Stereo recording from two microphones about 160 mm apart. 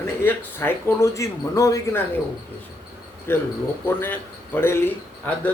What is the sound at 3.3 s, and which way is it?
Speech, 15° left (ahead or behind).